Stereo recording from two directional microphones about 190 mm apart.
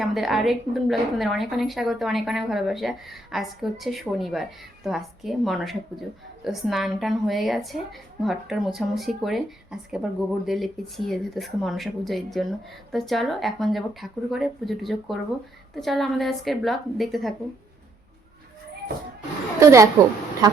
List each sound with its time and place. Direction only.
0.0 s a woman's voice: centre (ahead or behind)
19.5 s a woman's voice: 15° right (ahead or behind)